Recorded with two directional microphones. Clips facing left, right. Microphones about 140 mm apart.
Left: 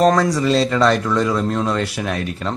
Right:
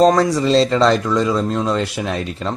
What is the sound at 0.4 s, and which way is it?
Speech, 25° right (ahead or behind).